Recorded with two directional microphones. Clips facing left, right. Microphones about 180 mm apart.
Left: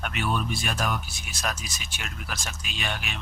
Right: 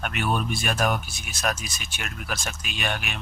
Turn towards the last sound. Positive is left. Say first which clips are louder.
# right 3 dB
turn(degrees=-55)  # may be behind; listen again after turning